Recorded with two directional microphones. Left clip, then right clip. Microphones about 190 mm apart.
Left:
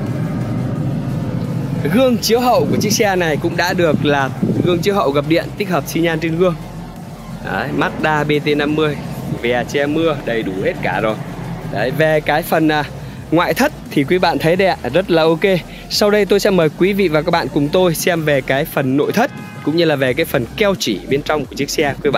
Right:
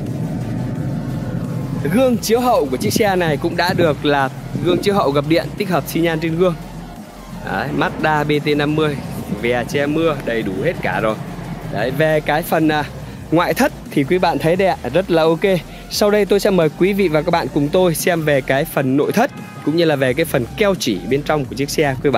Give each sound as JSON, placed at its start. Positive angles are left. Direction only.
{"t": 1.9, "sound": "speech", "side_deg": -15}
{"t": 11.7, "sound": "speech", "side_deg": -10}
{"t": 14.0, "sound": "speech", "side_deg": -5}